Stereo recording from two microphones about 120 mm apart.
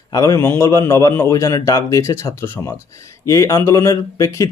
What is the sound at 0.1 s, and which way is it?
A man's voice, 25° left (ahead or behind).